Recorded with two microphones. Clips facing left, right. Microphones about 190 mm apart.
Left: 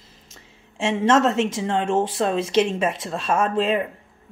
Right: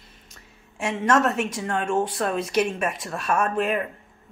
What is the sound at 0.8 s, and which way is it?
Speech, 25° left (ahead or behind).